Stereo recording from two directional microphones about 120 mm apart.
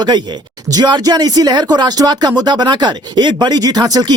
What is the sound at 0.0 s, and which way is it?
Speech, 40° right (ahead or behind).